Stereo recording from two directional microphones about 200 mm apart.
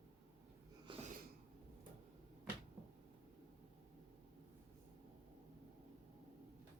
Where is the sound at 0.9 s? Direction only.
25° right (ahead or behind).